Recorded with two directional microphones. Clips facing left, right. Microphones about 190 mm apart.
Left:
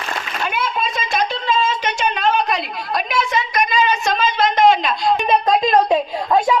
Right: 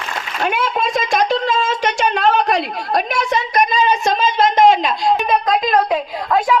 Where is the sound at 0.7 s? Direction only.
45° right (ahead or behind).